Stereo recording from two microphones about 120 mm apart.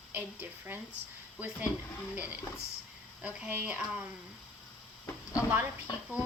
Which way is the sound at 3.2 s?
10° right (ahead or behind).